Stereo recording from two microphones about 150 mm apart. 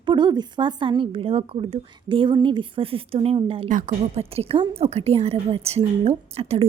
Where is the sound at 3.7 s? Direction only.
60° right (ahead or behind).